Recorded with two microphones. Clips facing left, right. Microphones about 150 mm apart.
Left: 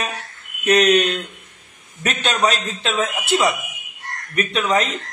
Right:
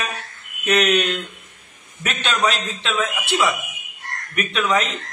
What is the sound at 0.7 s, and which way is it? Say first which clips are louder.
A man's voice: left 3 dB; 35° left (ahead or behind).